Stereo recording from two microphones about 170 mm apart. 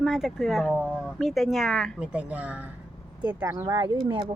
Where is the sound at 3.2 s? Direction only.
20° right (ahead or behind).